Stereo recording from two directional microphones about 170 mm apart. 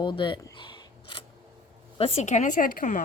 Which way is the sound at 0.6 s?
30° left (ahead or behind).